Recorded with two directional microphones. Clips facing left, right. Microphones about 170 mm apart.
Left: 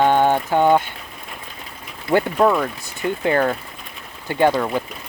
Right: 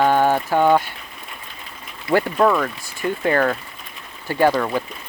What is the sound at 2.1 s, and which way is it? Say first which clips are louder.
Speech: left 1 dB; 20° left (ahead or behind).